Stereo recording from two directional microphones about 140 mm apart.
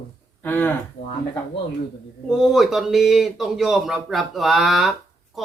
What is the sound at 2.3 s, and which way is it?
Speech, 5° right (ahead or behind).